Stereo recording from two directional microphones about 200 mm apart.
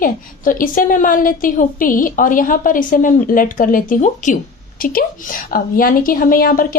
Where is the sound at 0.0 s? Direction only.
45° left (ahead or behind).